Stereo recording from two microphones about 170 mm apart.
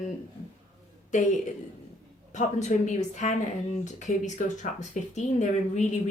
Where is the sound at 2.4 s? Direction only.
45° left (ahead or behind).